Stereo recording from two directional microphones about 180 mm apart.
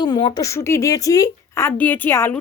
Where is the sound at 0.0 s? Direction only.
25° left (ahead or behind).